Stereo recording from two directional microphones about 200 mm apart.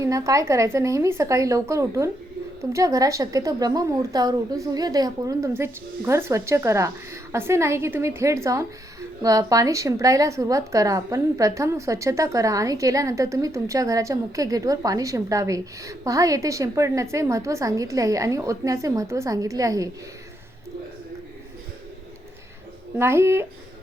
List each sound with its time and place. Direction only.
0.0 s a woman's voice: 15° right (ahead or behind)
23.0 s a woman's voice: 15° right (ahead or behind)